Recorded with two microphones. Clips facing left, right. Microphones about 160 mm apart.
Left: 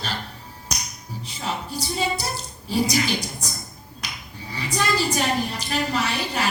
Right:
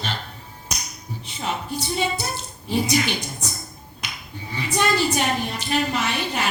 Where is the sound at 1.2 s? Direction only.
35° left (ahead or behind).